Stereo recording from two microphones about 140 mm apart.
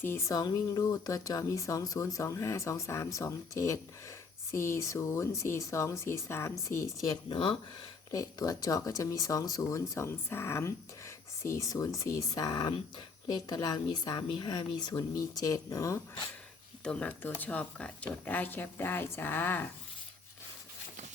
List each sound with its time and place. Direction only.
0.0 s speech: 20° left (ahead or behind)
7.3 s speech: 40° left (ahead or behind)
8.1 s speech: 25° left (ahead or behind)
16.8 s speech: 10° left (ahead or behind)